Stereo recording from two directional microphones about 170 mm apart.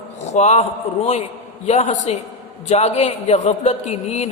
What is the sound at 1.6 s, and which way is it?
A man's voice, 40° left (ahead or behind).